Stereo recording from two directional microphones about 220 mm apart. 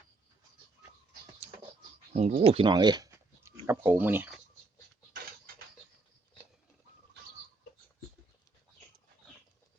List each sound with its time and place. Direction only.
2.1 s speech: 25° right (ahead or behind); by 4.3 s 10° right (ahead or behind)